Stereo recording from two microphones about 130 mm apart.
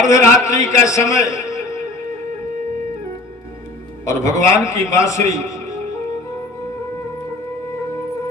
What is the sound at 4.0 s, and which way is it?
A man's voice, 25° left (ahead or behind).